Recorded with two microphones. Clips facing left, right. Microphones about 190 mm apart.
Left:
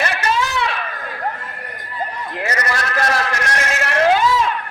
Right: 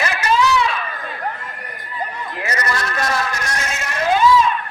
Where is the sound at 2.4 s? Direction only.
70° left (ahead or behind).